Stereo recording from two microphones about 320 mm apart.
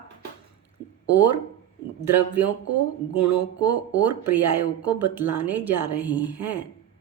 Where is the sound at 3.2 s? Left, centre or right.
Right.